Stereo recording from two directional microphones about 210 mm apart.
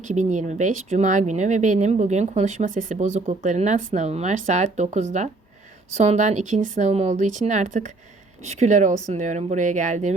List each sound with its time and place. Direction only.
0.0 s speech: 35° right (ahead or behind)